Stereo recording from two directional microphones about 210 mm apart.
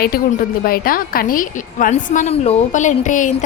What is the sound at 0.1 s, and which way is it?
A woman's voice, 45° left (ahead or behind).